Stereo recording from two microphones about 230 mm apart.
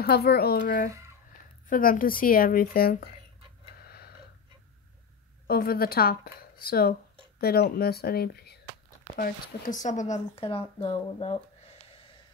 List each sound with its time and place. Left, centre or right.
0.0 s speech: left
0.8 s speech: centre
1.7 s speech: left
3.8 s a sound: left
5.5 s speech: left